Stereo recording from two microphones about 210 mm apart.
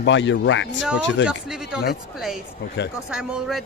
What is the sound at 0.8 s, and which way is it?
A woman's voice, 5° right (ahead or behind).